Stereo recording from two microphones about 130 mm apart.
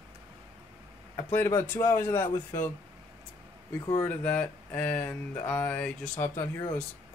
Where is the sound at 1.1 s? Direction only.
15° left (ahead or behind).